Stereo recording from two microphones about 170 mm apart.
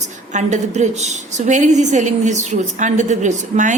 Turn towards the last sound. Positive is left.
turn(degrees=-45)  # may be behind; listen again after turning